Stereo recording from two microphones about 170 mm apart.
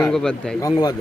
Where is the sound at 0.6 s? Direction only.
20° left (ahead or behind).